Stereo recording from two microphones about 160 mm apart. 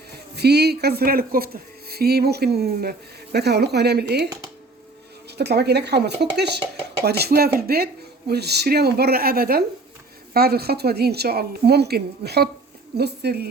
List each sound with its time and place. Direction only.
0.3 s speech: 90° right; by 1.5 s 65° right (ahead or behind)
1.9 s a woman's voice: 75° right (ahead or behind)
5.4 s speech: 90° right
8.3 s a woman's voice: 90° right